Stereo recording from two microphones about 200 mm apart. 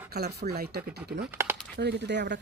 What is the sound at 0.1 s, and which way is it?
Speech, 55° right (ahead or behind).